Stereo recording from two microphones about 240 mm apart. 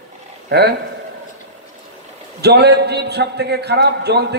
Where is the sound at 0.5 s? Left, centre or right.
Right.